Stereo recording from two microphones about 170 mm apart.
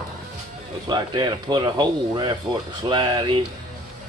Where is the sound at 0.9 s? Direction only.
25° right (ahead or behind).